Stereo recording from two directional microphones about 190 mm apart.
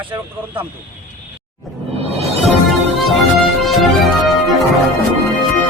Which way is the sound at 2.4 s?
Centre (ahead or behind).